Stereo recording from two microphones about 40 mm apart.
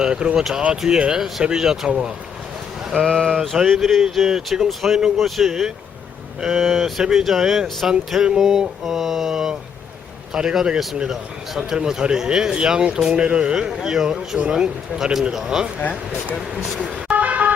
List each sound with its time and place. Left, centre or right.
0.0 s speech: centre
3.0 s speech: centre
3.8 s speech: centre
17.2 s vehicle: right